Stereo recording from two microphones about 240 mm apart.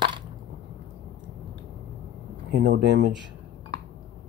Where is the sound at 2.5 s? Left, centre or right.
Right.